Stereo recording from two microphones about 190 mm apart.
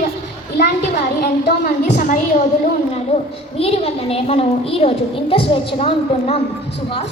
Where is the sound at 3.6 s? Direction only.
30° left (ahead or behind).